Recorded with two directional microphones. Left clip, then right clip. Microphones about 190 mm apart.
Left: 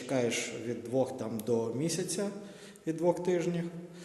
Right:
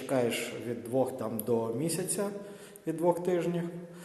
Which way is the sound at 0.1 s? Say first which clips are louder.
Right 1 dB; 10° left (ahead or behind).